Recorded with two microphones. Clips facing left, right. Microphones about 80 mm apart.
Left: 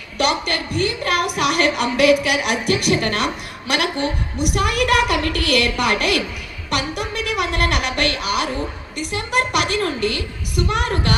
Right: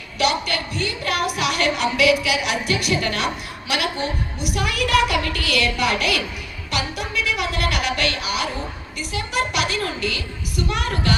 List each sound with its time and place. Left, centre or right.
0.2 s a woman's voice: left
4.5 s a woman's voice: left
6.7 s music: left
8.2 s a woman's voice: left